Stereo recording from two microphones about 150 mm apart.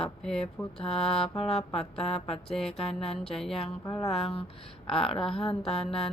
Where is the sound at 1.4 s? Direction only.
40° left (ahead or behind).